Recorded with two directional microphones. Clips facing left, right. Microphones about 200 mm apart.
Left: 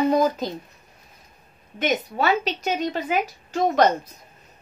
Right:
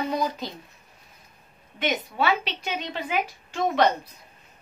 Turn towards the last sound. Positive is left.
turn(degrees=40)  # may be behind; listen again after turning